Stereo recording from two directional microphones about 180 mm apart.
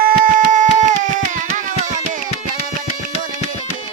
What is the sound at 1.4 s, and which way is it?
Music, 45° right (ahead or behind).